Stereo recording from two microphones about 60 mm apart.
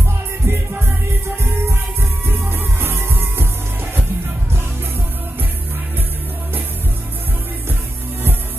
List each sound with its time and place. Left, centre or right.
0.5 s music: right